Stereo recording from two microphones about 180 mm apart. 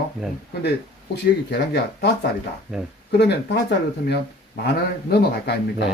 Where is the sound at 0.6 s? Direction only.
70° left (ahead or behind).